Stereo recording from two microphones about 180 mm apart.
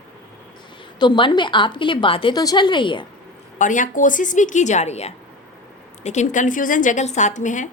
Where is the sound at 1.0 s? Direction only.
25° left (ahead or behind).